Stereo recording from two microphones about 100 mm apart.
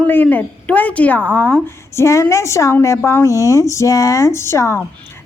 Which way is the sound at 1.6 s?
30° left (ahead or behind).